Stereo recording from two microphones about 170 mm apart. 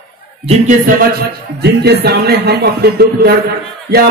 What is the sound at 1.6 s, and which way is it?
Speech, 75° right (ahead or behind).